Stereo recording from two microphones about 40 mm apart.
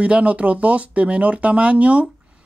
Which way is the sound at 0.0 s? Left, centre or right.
Right.